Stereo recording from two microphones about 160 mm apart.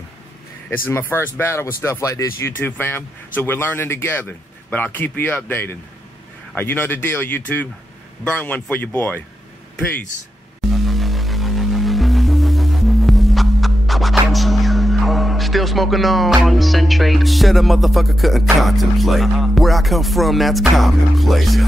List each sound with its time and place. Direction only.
0.8 s speech: 15° left (ahead or behind)
10.7 s music: centre (ahead or behind)